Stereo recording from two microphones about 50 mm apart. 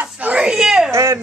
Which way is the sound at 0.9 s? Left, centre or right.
Right.